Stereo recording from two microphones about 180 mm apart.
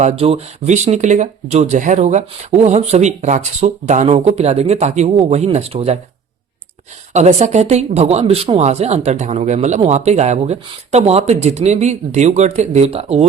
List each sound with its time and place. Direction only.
0.0 s speech: 35° right (ahead or behind)
7.1 s speech: 40° right (ahead or behind)